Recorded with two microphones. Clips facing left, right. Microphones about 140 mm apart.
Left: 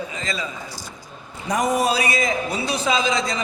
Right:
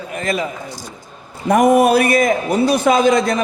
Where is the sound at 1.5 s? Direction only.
55° right (ahead or behind).